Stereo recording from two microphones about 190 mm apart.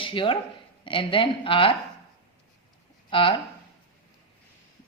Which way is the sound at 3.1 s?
25° left (ahead or behind).